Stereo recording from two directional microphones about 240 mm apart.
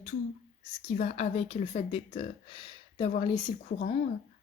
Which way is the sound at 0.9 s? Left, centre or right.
Left.